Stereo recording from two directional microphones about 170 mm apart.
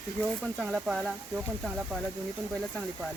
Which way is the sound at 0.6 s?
5° right (ahead or behind).